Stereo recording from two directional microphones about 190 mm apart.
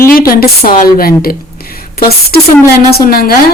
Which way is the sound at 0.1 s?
50° left (ahead or behind).